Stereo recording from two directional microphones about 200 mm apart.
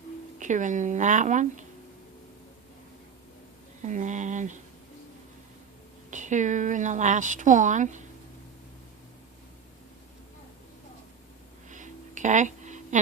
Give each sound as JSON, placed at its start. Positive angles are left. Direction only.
{"t": 0.3, "sound": "a woman's voice", "side_deg": -40}
{"t": 3.8, "sound": "a woman's voice", "side_deg": -40}
{"t": 6.1, "sound": "a woman's voice", "side_deg": -40}
{"t": 11.7, "sound": "a sound", "side_deg": -40}